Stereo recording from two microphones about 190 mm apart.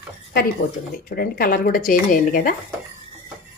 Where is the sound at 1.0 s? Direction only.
50° left (ahead or behind).